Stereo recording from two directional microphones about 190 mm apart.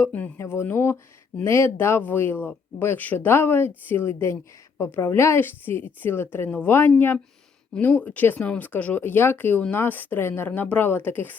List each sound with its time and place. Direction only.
0.0 s speech: 10° left (ahead or behind)